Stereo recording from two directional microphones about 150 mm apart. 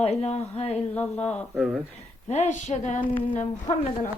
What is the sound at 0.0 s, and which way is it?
Speech, 45° left (ahead or behind).